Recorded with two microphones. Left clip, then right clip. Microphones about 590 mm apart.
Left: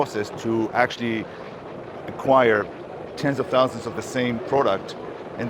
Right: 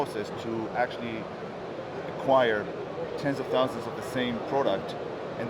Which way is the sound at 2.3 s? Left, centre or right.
Left.